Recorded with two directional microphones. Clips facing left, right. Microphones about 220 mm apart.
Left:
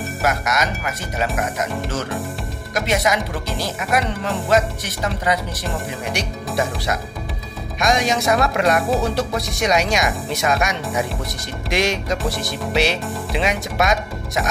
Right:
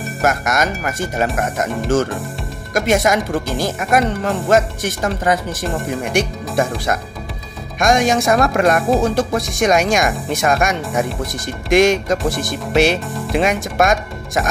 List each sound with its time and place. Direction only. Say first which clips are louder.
0.2 s speech: right 4 dB; 50° right (ahead or behind)
2.7 s speech: right 5 dB; 50° right (ahead or behind)
7.8 s speech: right 4 dB; 50° right (ahead or behind)